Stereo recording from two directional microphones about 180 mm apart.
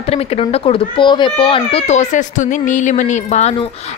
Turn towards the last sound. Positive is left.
turn(degrees=40)  # may be behind; listen again after turning